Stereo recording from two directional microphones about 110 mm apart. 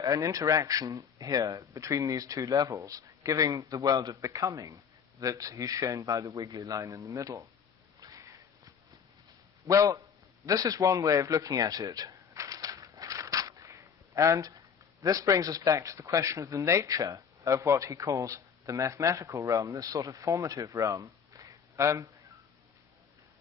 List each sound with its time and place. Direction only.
0.0 s speech: 35° right (ahead or behind)
8.0 s sniff: 30° right (ahead or behind)
9.6 s speech: 30° right (ahead or behind)
10.4 s a sound: 35° right (ahead or behind)
15.0 s speech: 30° right (ahead or behind)